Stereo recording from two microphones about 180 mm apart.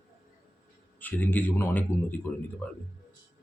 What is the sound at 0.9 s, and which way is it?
Speech, 10° left (ahead or behind).